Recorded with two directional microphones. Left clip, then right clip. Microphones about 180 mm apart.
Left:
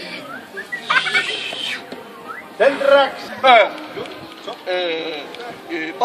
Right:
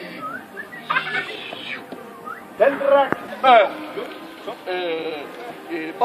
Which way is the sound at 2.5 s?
10° left (ahead or behind).